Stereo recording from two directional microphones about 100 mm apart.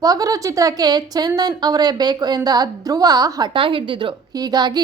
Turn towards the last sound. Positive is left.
turn(degrees=-40)  # may be behind; listen again after turning